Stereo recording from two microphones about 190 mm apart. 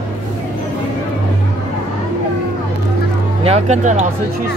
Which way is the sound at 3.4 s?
35° right (ahead or behind).